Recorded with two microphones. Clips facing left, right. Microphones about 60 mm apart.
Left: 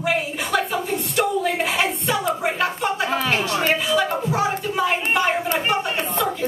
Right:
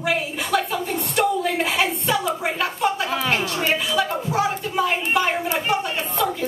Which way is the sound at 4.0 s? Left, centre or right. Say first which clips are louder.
Left 1 dB; centre.